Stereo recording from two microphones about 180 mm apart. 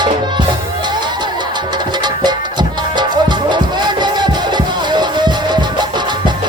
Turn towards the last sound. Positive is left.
turn(degrees=-25)  # may be behind; listen again after turning